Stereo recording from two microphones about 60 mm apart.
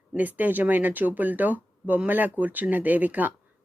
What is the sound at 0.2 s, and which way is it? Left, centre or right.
Speech, right.